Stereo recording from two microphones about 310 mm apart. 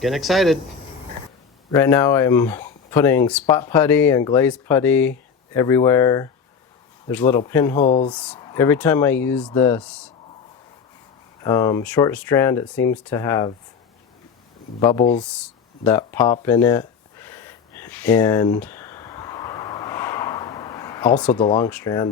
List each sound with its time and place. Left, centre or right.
0.0 s speech: centre
1.7 s speech: centre
7.8 s speech: centre
11.4 s speech: centre
14.8 s speech: centre
15.2 s a sound: centre